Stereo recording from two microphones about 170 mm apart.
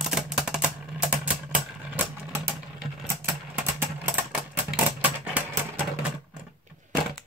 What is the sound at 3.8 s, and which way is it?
Typewriter, 10° right (ahead or behind).